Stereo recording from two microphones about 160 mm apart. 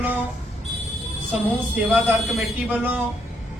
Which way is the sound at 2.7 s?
10° right (ahead or behind).